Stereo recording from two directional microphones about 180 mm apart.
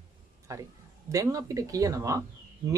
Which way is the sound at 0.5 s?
20° right (ahead or behind).